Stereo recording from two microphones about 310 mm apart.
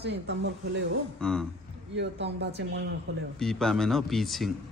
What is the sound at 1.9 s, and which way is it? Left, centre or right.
Speech, right.